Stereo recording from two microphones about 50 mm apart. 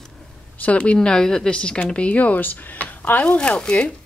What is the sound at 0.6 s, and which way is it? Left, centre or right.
Speech, left.